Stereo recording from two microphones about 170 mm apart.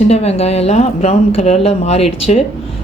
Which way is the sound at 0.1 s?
40° left (ahead or behind).